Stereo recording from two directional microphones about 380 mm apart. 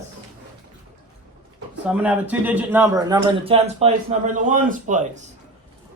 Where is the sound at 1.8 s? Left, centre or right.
Centre.